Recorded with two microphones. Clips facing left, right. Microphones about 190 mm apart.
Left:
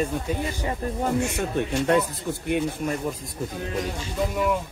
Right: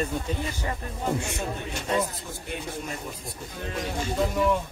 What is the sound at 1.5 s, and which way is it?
Speech, 65° left (ahead or behind).